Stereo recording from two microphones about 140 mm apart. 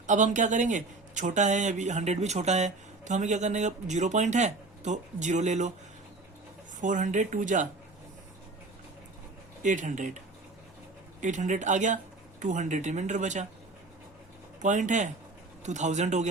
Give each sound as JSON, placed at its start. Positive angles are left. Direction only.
{"t": 0.1, "sound": "speech", "side_deg": -60}
{"t": 6.8, "sound": "speech", "side_deg": -65}
{"t": 9.6, "sound": "speech", "side_deg": -65}
{"t": 11.2, "sound": "speech", "side_deg": -60}
{"t": 14.6, "sound": "speech", "side_deg": -60}